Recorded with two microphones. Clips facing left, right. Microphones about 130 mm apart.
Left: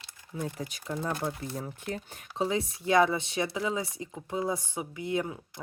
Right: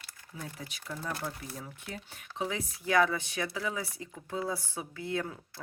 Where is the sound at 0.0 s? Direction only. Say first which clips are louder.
Left 8 dB; 20° left (ahead or behind).